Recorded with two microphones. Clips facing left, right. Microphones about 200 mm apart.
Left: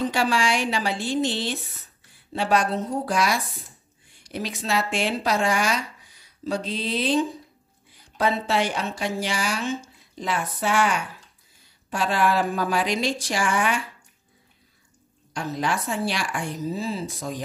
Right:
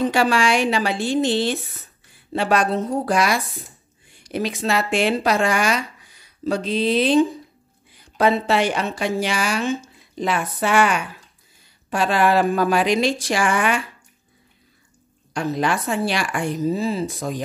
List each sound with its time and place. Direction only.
0.1 s a woman's voice: 70° right (ahead or behind)
3.1 s a woman's voice: 70° right (ahead or behind)
10.1 s a woman's voice: 85° right
15.3 s a woman's voice: 70° right (ahead or behind)